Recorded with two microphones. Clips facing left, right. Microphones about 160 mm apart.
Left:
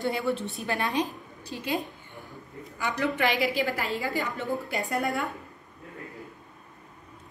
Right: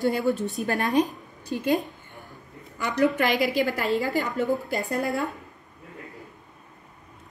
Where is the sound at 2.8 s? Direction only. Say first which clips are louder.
Right 4 dB; 40° right (ahead or behind).